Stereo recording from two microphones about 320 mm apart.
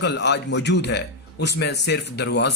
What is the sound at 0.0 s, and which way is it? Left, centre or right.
A man's voice, left.